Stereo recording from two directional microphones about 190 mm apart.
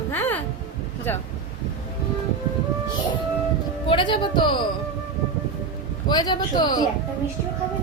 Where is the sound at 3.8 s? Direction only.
25° left (ahead or behind).